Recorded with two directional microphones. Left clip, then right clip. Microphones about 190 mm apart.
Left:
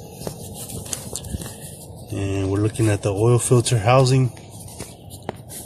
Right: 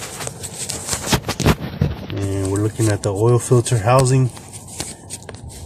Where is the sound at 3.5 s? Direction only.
20° left (ahead or behind).